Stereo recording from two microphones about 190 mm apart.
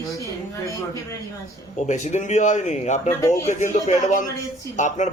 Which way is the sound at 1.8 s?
40° left (ahead or behind).